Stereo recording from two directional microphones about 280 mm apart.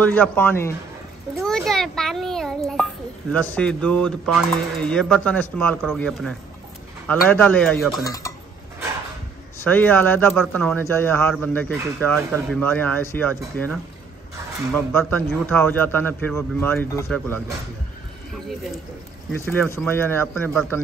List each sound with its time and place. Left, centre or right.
0.0 s a man's voice: centre
9.6 s a man's voice: centre
12.3 s speech: centre
12.5 s a man's voice: centre